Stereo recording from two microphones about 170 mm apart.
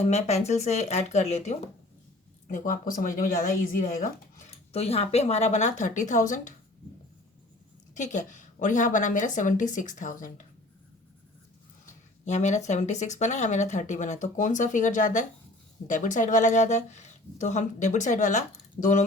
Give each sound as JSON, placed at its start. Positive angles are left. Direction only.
{"t": 0.0, "sound": "speech", "side_deg": 40}
{"t": 2.5, "sound": "speech", "side_deg": 50}
{"t": 7.9, "sound": "speech", "side_deg": 45}
{"t": 12.2, "sound": "speech", "side_deg": 45}